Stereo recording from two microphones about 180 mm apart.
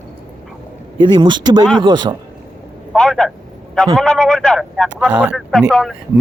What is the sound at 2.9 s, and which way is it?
A man's voice, centre (ahead or behind).